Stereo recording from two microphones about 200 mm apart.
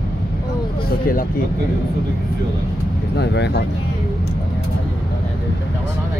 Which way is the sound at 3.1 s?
60° left (ahead or behind).